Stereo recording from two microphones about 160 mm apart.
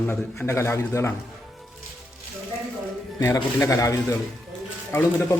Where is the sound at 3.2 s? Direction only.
20° left (ahead or behind).